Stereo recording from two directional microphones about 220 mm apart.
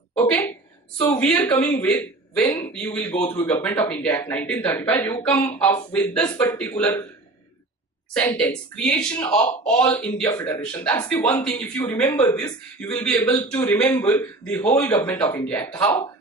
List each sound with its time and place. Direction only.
0.1 s a woman's voice: 5° left (ahead or behind)
3.2 s speech: 20° left (ahead or behind)
3.4 s speech: 10° left (ahead or behind)
8.1 s a woman's voice: 5° left (ahead or behind)
9.2 s speech: 25° left (ahead or behind)
9.8 s speech: 5° left (ahead or behind)